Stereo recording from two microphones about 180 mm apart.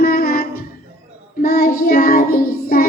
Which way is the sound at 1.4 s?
55° left (ahead or behind).